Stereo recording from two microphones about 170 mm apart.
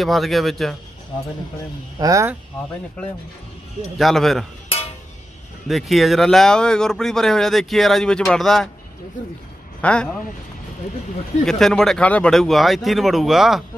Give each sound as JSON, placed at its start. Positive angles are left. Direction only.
{"t": 0.0, "sound": "speech", "side_deg": 0}
{"t": 2.0, "sound": "speech", "side_deg": -20}
{"t": 4.0, "sound": "speech", "side_deg": 0}
{"t": 5.7, "sound": "speech", "side_deg": 0}
{"t": 9.8, "sound": "a man's voice", "side_deg": 5}
{"t": 11.4, "sound": "speech", "side_deg": 5}